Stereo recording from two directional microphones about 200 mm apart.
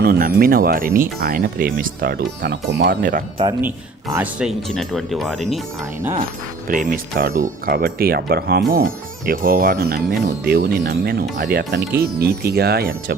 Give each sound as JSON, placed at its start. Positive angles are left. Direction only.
{"t": 0.0, "sound": "speech", "side_deg": -50}
{"t": 2.7, "sound": "speech", "side_deg": -60}
{"t": 3.0, "sound": "speech", "side_deg": -45}
{"t": 4.1, "sound": "speech", "side_deg": -5}
{"t": 6.7, "sound": "speech", "side_deg": -45}